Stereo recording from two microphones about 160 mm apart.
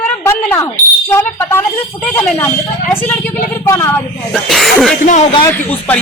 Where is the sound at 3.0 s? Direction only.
10° left (ahead or behind).